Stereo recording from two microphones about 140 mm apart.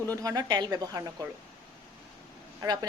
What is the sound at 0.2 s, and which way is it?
Speech, 25° right (ahead or behind).